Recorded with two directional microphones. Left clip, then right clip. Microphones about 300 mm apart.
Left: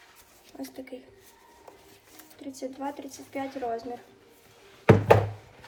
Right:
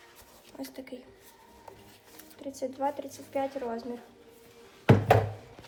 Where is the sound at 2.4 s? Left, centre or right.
Centre.